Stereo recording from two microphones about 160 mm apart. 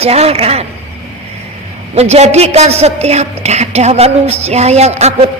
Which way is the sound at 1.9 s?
45° right (ahead or behind).